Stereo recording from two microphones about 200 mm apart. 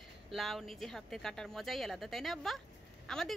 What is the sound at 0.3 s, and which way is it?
A woman's voice, centre (ahead or behind).